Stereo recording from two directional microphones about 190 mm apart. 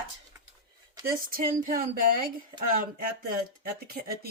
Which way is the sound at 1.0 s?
50° right (ahead or behind).